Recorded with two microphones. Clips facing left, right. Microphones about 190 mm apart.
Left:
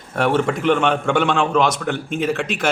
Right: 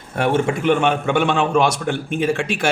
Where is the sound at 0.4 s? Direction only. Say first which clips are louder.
Even; 10° right (ahead or behind).